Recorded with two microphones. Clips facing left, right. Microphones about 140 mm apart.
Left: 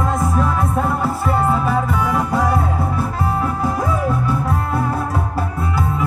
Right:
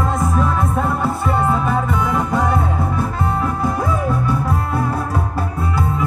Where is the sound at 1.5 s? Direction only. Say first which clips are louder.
Even; 5° left (ahead or behind).